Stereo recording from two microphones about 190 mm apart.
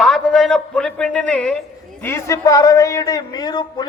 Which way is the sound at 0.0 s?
5° left (ahead or behind).